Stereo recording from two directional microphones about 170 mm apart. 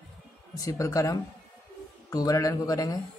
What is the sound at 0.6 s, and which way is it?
A man's voice, 20° left (ahead or behind).